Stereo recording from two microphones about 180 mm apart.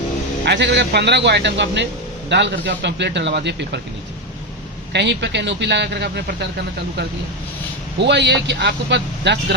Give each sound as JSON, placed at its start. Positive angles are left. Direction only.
{"t": 0.4, "sound": "a man's voice", "side_deg": -70}
{"t": 4.9, "sound": "a man's voice", "side_deg": -70}
{"t": 8.0, "sound": "a man's voice", "side_deg": -75}